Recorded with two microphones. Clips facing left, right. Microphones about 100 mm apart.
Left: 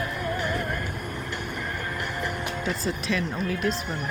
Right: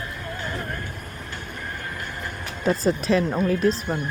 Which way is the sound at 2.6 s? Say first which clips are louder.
Right 11 dB; 40° right (ahead or behind).